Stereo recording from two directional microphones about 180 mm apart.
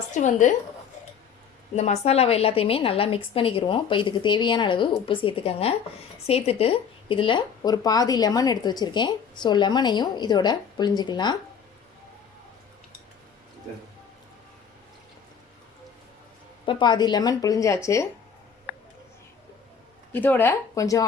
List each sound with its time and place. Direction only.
0.1 s a woman's voice: 40° left (ahead or behind)
1.7 s a woman's voice: 35° left (ahead or behind)
16.6 s speech: 25° left (ahead or behind)
20.1 s speech: 10° left (ahead or behind)